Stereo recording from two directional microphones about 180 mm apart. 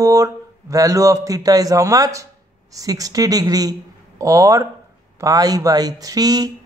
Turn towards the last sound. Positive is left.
turn(degrees=-20)  # may be behind; listen again after turning